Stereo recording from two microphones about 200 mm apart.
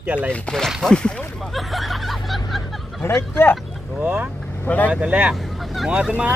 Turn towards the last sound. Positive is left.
turn(degrees=-5)  # may be behind; listen again after turning